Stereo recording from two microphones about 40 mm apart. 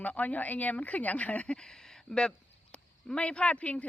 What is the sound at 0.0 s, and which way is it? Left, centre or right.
Speech, left.